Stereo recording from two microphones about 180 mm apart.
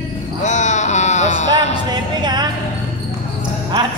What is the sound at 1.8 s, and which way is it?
Music, 25° right (ahead or behind).